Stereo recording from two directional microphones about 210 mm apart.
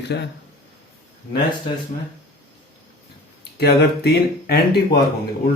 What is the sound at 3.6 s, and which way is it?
Speech, 50° left (ahead or behind).